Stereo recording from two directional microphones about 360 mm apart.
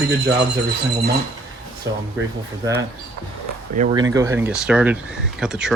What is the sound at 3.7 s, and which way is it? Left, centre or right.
Speech, centre.